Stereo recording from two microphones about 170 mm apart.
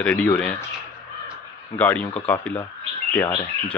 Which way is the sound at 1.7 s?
10° left (ahead or behind).